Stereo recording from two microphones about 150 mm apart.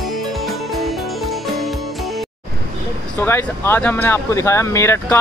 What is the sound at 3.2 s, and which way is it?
Speech, 15° left (ahead or behind).